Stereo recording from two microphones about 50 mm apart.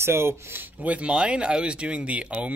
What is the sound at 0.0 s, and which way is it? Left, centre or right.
Speech, right.